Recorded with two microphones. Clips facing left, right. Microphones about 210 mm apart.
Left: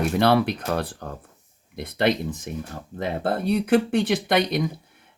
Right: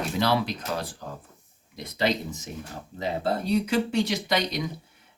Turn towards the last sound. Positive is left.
turn(degrees=55)  # may be behind; listen again after turning